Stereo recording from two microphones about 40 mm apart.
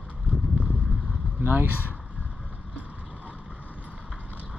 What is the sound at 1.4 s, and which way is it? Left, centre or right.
Speech, right.